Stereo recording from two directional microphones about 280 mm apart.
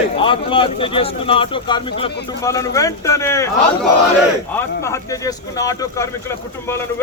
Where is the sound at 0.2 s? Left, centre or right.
Centre.